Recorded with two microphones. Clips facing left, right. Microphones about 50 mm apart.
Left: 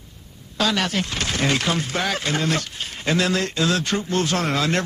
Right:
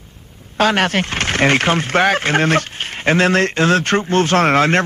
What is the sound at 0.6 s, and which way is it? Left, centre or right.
Speech, right.